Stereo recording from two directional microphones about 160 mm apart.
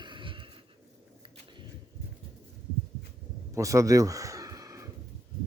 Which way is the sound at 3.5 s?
20° right (ahead or behind).